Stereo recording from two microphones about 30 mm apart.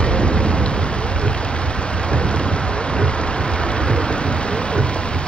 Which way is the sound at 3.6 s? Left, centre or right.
Left.